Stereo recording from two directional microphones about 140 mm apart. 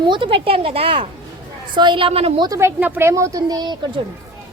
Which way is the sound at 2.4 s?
25° right (ahead or behind).